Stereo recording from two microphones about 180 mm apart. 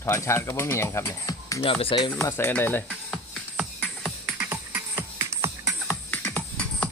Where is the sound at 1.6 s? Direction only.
30° left (ahead or behind).